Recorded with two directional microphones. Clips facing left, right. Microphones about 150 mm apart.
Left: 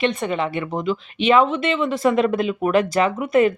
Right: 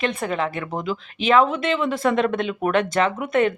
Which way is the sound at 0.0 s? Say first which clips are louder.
Left 2 dB; centre (ahead or behind).